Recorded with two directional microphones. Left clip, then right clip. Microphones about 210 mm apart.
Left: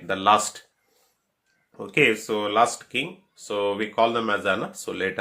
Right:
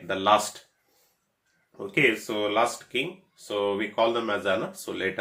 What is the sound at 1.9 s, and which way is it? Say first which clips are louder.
Speech: left 3 dB; 35° left (ahead or behind).